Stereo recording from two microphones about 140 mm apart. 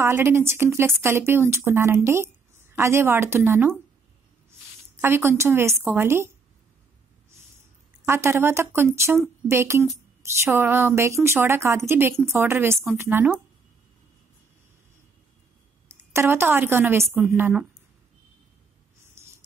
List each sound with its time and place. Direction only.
0.0 s speech: 15° right (ahead or behind)
5.0 s speech: 15° right (ahead or behind)
8.0 s speech: 20° right (ahead or behind)
16.1 s speech: 15° right (ahead or behind)